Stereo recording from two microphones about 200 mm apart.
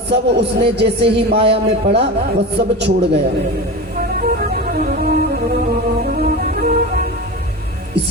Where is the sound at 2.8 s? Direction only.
55° right (ahead or behind).